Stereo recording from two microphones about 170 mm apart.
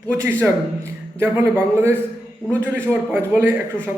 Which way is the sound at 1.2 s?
15° right (ahead or behind).